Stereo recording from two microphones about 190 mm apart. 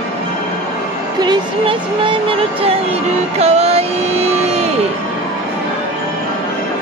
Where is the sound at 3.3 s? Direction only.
35° right (ahead or behind).